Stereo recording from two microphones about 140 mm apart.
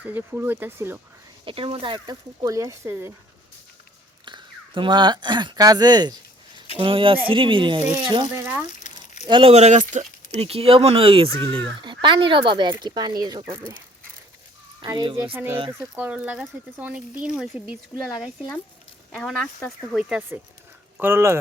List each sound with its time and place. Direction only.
0.0 s speech: 15° right (ahead or behind)
1.5 s speech: 40° right (ahead or behind); by 3.1 s 20° right (ahead or behind)
4.3 s speech: 35° right (ahead or behind)
8.4 s speech: 15° right (ahead or behind)
9.2 s speech: 40° right (ahead or behind); by 10.4 s 60° right (ahead or behind)
10.4 s speech: 45° right (ahead or behind)
14.8 s speech: 35° right (ahead or behind)
15.3 s speech: 15° right (ahead or behind)